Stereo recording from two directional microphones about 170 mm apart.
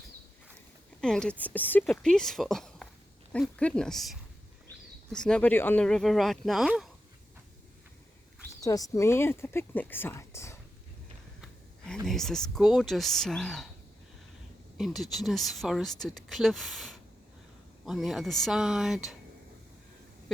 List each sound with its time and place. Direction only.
1.0 s speech: 5° left (ahead or behind)
8.6 s speech: 20° left (ahead or behind)
12.0 s speech: centre (ahead or behind)
14.8 s speech: centre (ahead or behind)